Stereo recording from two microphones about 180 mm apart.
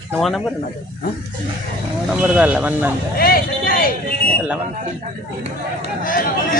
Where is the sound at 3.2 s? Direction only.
55° left (ahead or behind).